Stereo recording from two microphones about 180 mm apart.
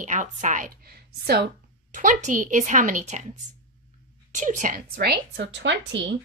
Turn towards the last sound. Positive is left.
turn(degrees=-80)